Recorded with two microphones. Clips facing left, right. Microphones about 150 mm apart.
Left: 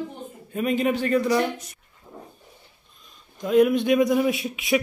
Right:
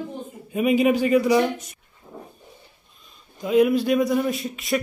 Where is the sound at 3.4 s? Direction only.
Centre (ahead or behind).